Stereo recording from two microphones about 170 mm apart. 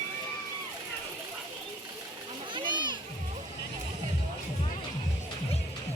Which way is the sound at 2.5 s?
25° right (ahead or behind).